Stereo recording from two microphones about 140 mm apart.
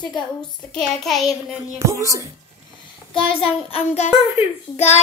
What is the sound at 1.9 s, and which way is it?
Speech, 20° right (ahead or behind).